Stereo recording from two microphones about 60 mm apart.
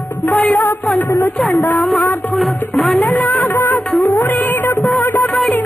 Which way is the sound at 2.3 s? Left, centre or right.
Centre.